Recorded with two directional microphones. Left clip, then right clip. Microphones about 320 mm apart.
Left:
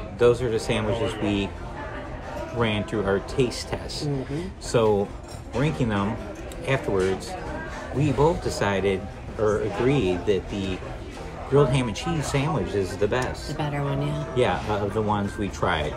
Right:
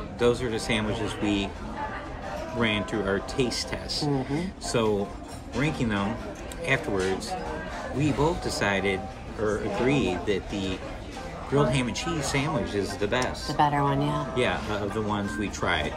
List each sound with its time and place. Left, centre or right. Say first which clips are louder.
0.2 s speech: left 5 dB; centre
2.6 s speech: left 2 dB; centre
13.6 s speech: right 7 dB; centre
14.3 s speech: left 8 dB; centre